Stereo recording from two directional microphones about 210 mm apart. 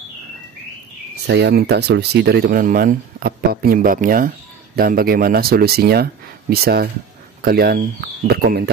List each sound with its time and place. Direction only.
1.2 s speech: 55° right (ahead or behind)